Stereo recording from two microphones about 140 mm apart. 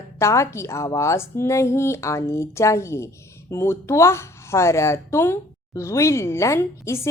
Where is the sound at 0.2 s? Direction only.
20° left (ahead or behind).